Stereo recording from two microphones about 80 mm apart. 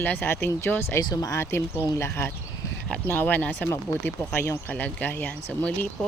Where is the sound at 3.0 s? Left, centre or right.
Left.